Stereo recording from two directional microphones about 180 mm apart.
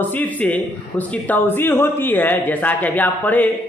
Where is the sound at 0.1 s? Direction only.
10° left (ahead or behind).